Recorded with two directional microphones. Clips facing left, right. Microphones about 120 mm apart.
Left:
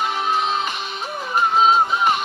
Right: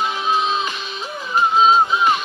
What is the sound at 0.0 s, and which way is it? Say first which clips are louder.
Music: right 1 dB; 55° left (ahead or behind).